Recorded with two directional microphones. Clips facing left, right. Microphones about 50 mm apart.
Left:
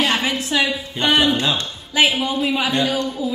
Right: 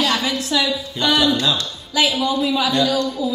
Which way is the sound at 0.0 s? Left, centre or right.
Left.